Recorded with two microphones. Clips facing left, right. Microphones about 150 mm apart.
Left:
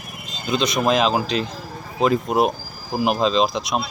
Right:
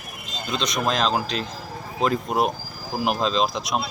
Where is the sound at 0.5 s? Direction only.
5° left (ahead or behind).